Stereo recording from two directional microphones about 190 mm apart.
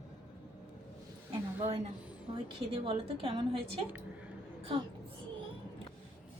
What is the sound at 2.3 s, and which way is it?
A woman's voice, 25° right (ahead or behind).